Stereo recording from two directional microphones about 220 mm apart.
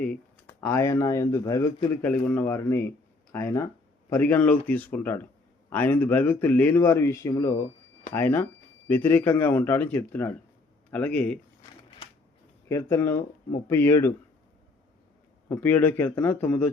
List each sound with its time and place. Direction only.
0.6 s speech: 10° left (ahead or behind)
12.6 s speech: 10° left (ahead or behind)
15.4 s speech: 10° left (ahead or behind)